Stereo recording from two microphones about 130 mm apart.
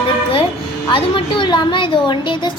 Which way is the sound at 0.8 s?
40° left (ahead or behind).